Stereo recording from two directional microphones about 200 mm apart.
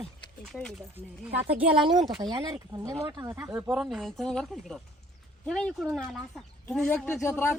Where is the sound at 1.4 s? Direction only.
30° right (ahead or behind); by 3.7 s 15° right (ahead or behind).